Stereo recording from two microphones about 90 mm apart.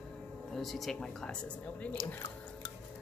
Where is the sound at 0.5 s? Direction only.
Centre (ahead or behind).